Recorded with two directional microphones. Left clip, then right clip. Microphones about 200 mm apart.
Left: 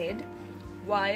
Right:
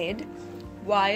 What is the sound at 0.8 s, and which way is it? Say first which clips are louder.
Speech: right 5 dB; 35° right (ahead or behind).